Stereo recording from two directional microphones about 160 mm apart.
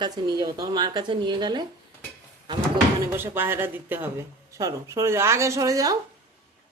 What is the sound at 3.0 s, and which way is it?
Speech, 15° right (ahead or behind).